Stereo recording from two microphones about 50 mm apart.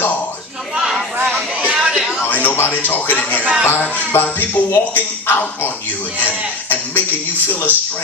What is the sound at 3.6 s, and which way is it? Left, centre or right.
A man's voice, left.